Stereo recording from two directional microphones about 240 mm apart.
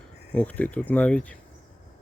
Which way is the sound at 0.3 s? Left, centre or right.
Centre.